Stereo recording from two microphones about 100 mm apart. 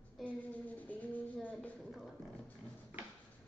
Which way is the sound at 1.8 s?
5° right (ahead or behind).